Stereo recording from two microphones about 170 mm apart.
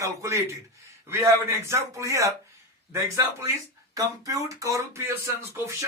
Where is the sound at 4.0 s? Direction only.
20° right (ahead or behind).